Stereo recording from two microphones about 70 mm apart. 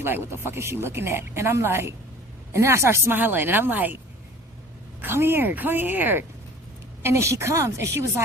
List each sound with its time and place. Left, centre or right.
0.0 s a woman's voice: right
4.9 s a woman's voice: right
7.0 s speech: right